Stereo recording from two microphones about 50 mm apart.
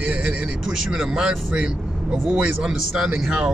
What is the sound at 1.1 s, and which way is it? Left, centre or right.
Speech, centre.